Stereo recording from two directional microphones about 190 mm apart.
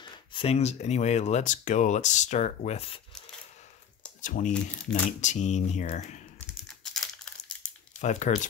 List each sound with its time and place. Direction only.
0.0 s speech: 25° left (ahead or behind)
4.2 s speech: 40° left (ahead or behind)
6.5 s crumpling: centre (ahead or behind)
8.0 s speech: 40° left (ahead or behind)